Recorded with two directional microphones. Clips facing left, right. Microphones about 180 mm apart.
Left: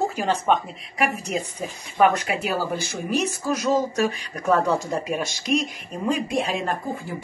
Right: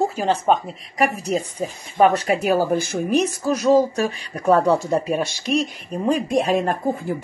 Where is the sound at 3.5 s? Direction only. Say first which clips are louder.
Right 6 dB; 35° right (ahead or behind).